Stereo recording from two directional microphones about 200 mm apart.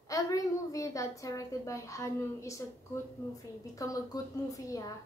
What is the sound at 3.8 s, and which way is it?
A woman's voice, 15° left (ahead or behind).